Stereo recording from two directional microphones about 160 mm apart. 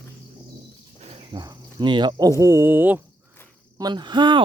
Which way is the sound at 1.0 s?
40° right (ahead or behind).